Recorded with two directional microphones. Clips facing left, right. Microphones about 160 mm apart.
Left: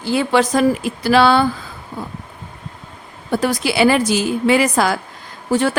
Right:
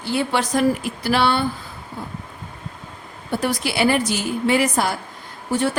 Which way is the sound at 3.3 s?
90° left.